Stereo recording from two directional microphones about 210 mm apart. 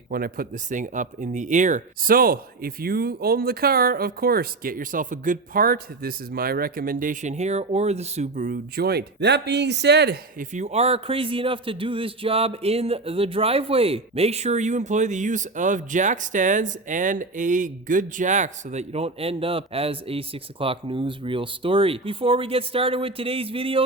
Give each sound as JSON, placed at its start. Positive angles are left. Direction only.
{"t": 0.1, "sound": "speech", "side_deg": -45}
{"t": 10.5, "sound": "speech", "side_deg": -30}